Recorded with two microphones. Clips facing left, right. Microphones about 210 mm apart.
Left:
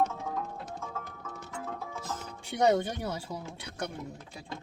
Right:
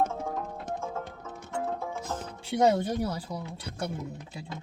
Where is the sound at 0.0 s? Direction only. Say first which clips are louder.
Right 1 dB; 50° right (ahead or behind).